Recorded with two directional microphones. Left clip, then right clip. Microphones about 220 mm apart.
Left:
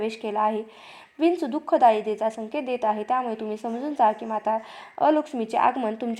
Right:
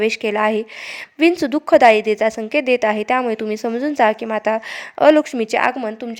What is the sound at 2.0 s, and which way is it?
Speech, 65° right (ahead or behind).